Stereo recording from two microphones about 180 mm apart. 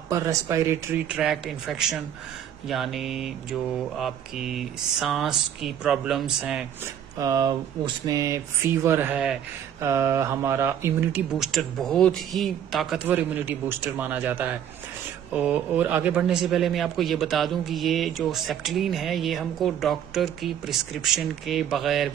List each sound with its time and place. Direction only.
0.1 s speech: 15° right (ahead or behind)
1.0 s speech: 5° right (ahead or behind)
7.2 s speech: 20° right (ahead or behind)
11.3 s speech: centre (ahead or behind)
13.1 s speech: 10° right (ahead or behind)